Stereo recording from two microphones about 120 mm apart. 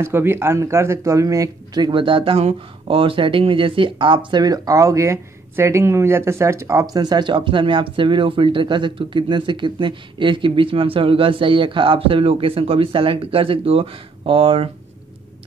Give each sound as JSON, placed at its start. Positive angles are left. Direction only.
{"t": 0.0, "sound": "speech", "side_deg": -20}